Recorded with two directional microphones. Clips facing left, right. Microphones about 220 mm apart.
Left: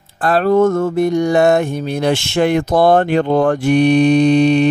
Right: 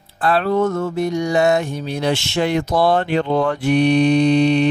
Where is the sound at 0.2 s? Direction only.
45° left (ahead or behind).